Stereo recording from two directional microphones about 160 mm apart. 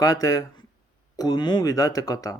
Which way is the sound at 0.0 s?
20° left (ahead or behind).